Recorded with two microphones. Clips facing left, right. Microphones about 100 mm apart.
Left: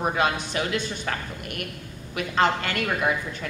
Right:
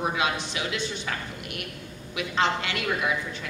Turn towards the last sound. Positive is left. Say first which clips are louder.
# left 2 dB
turn(degrees=45)  # may be behind; listen again after turning